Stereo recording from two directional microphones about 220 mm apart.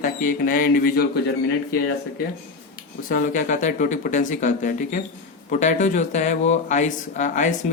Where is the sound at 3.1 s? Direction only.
35° left (ahead or behind).